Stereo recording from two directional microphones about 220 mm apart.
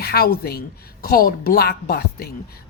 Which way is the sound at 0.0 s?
45° left (ahead or behind).